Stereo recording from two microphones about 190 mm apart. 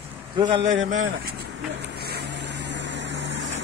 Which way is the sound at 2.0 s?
60° right (ahead or behind).